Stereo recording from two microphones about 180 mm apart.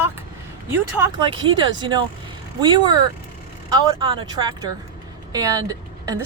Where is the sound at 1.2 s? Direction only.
25° right (ahead or behind).